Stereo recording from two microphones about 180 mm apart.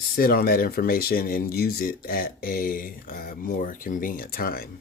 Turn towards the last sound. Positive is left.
turn(degrees=55)  # may be behind; listen again after turning